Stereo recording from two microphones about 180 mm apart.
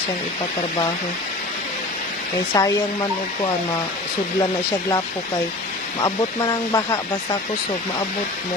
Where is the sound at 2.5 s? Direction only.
20° left (ahead or behind).